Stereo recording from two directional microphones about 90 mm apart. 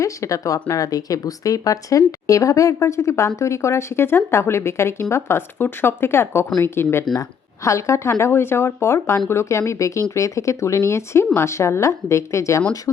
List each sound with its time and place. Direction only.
0.0 s speech: 35° left (ahead or behind)
7.1 s speech: 40° left (ahead or behind)